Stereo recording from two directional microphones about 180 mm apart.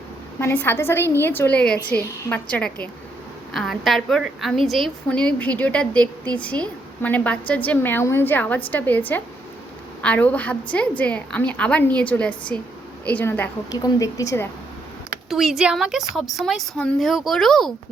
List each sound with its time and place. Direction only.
0.3 s a woman's voice: 10° left (ahead or behind)
15.3 s speech: centre (ahead or behind)